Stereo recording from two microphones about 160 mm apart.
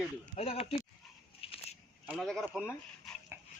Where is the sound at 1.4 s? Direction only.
35° left (ahead or behind).